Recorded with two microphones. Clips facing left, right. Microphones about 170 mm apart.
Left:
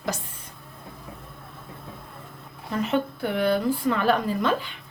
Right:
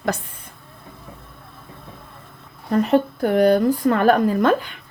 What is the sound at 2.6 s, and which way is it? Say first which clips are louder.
Speech: right 8 dB; 45° right (ahead or behind).